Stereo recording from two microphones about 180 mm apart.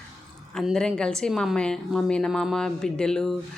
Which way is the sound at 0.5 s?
Centre (ahead or behind).